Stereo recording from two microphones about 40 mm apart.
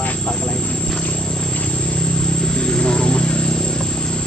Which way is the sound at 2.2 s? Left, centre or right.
Centre.